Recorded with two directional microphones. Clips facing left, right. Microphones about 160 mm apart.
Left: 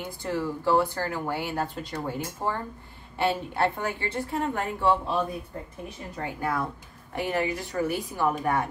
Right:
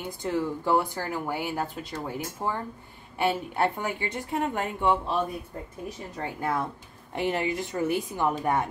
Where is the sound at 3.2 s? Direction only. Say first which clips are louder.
Even; 15° right (ahead or behind).